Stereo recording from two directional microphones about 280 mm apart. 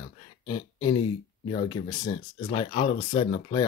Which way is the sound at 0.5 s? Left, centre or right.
Centre.